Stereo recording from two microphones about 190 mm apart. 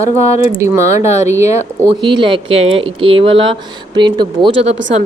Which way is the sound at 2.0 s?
25° right (ahead or behind).